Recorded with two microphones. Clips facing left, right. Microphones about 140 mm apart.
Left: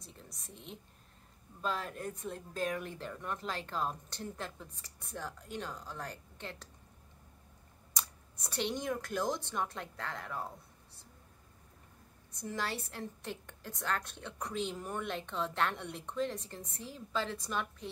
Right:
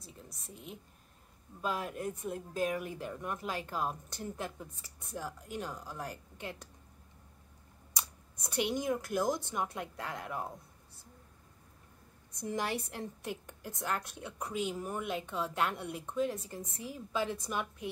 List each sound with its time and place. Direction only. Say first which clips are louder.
0.0 s a sound: right 2 dB; 5° right (ahead or behind)
1.6 s a woman's voice: right 2 dB; 10° right (ahead or behind)
8.5 s a woman's voice: right 3 dB; 10° right (ahead or behind)
12.4 s a woman's voice: right 3 dB; 15° right (ahead or behind)